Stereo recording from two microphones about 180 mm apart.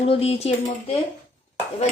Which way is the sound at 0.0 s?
35° left (ahead or behind).